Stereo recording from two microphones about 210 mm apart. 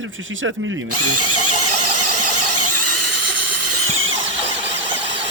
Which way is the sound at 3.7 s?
80° right.